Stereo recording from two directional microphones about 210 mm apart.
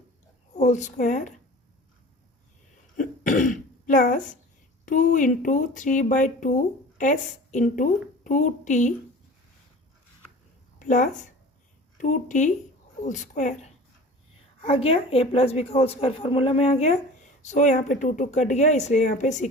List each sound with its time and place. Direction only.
0.5 s a woman's voice: 35° left (ahead or behind)
3.0 s throat clearing: 40° left (ahead or behind)
4.9 s speech: 40° left (ahead or behind)
10.8 s a sound: 35° left (ahead or behind)
11.9 s a woman's voice: 35° left (ahead or behind)